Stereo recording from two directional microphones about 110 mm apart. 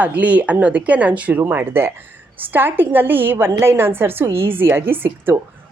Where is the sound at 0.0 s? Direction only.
15° right (ahead or behind).